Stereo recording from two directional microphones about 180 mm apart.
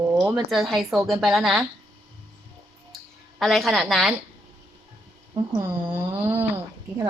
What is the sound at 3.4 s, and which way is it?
Speech, centre (ahead or behind).